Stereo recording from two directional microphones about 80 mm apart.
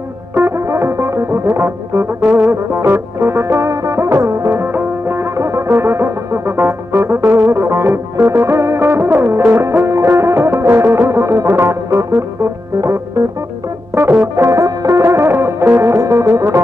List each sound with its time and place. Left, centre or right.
0.3 s music: right
13.9 s music: right